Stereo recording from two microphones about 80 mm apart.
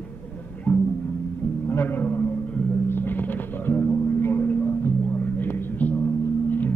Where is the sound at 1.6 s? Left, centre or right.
Left.